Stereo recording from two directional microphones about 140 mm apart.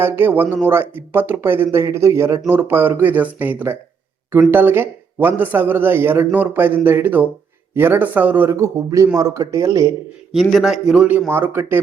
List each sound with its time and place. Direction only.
0.0 s speech: 15° right (ahead or behind)
10.5 s speech: 5° right (ahead or behind)